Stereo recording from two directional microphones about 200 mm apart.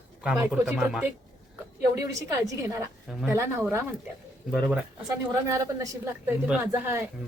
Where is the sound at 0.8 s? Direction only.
Centre (ahead or behind).